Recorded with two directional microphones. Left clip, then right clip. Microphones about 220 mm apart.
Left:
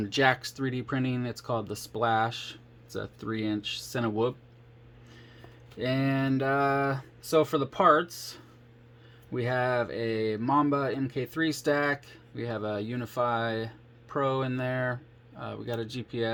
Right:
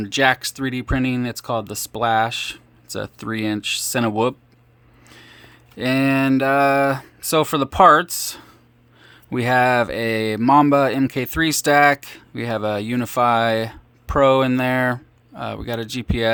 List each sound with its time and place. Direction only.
0.0 s speech: 20° right (ahead or behind)
5.7 s speech: 30° right (ahead or behind)